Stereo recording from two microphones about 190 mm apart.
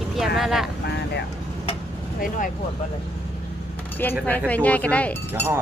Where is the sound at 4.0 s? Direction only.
10° left (ahead or behind).